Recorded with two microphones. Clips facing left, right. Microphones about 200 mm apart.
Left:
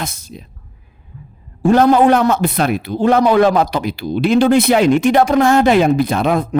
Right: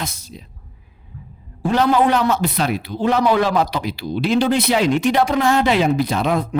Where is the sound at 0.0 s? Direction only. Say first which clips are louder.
Left 3 dB; 50° left (ahead or behind).